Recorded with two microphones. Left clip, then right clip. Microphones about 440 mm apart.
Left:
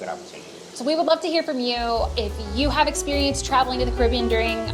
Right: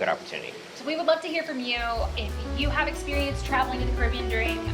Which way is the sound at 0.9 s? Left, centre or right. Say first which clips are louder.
Left 5 dB; left.